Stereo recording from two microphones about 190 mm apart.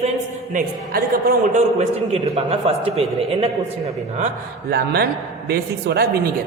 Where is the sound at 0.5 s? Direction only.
50° right (ahead or behind).